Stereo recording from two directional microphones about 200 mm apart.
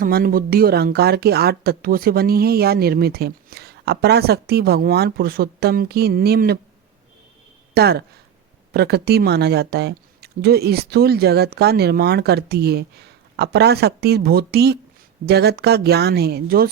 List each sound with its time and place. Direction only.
0.0 s speech: 45° right (ahead or behind)
7.7 s speech: 50° right (ahead or behind)